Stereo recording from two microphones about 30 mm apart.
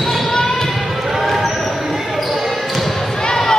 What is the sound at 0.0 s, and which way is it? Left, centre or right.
Basketball bounce, centre.